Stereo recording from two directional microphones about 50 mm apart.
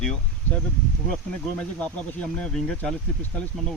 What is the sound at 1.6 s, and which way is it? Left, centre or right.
Speech, left.